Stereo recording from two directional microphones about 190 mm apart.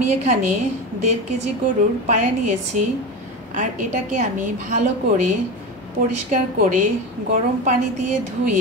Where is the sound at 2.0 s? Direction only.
40° right (ahead or behind).